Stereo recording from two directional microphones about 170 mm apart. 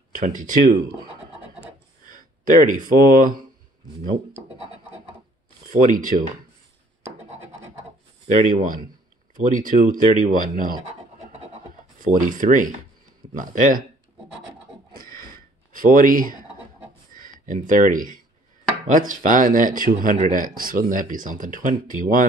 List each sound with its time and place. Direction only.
0.1 s speech: 50° right (ahead or behind)
2.0 s speech: 50° right (ahead or behind)
5.9 s speech: 50° right (ahead or behind)
8.3 s speech: 55° right (ahead or behind)
10.8 s scratch: 40° right (ahead or behind)
12.0 s speech: 50° right (ahead or behind)
15.2 s a sound: 55° right (ahead or behind)
17.1 s speech: 50° right (ahead or behind)